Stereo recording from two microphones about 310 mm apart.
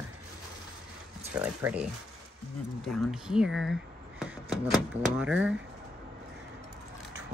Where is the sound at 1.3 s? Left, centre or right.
Centre.